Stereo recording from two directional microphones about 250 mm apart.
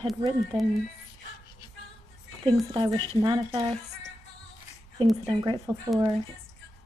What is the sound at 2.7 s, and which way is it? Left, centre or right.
Speech, centre.